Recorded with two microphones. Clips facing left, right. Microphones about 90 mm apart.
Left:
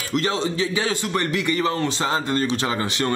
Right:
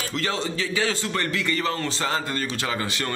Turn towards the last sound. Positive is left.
turn(degrees=25)  # may be behind; listen again after turning